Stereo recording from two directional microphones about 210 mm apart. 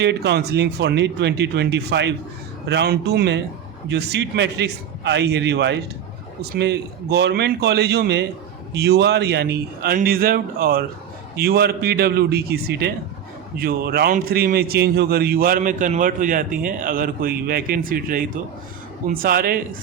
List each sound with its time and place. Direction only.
0.0 s a man's voice: 55° right (ahead or behind)